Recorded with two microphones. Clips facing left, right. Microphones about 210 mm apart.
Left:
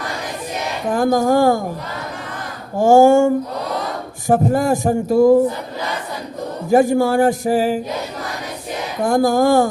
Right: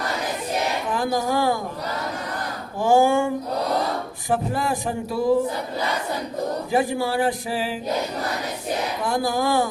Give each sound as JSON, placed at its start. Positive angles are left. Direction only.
{"t": 0.9, "sound": "speech", "side_deg": 45}
{"t": 2.7, "sound": "speech", "side_deg": 45}
{"t": 6.7, "sound": "speech", "side_deg": 45}
{"t": 9.0, "sound": "speech", "side_deg": 45}